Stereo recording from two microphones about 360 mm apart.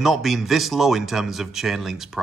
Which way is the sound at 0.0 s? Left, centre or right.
Centre.